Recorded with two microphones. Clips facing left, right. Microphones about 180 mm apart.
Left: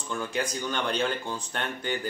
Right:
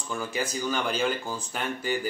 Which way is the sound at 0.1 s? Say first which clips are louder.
Even; 5° right (ahead or behind).